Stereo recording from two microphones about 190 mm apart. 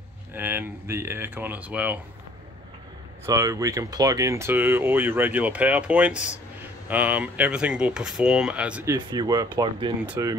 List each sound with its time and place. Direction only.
0.3 s speech: 10° right (ahead or behind)
3.3 s speech: 15° right (ahead or behind)
8.9 s speech: 20° right (ahead or behind)
10.0 s speech: 10° right (ahead or behind)